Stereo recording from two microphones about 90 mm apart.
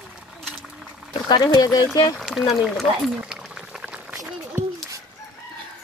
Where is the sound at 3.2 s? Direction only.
10° right (ahead or behind).